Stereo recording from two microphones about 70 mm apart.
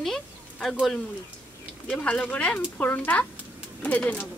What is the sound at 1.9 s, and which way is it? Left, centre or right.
Speech, centre.